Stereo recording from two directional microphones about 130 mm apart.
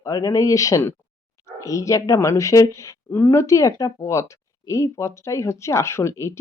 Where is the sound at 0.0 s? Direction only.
25° left (ahead or behind).